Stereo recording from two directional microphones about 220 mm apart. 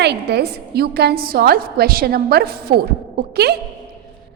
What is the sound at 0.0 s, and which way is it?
A woman's voice, 50° right (ahead or behind).